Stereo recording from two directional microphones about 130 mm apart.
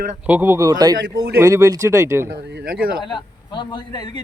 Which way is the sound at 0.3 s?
15° right (ahead or behind).